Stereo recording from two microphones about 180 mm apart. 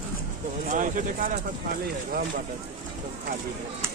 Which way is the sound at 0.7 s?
45° right (ahead or behind).